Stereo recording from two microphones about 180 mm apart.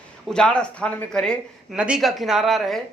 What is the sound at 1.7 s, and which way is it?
A man's voice, 5° right (ahead or behind).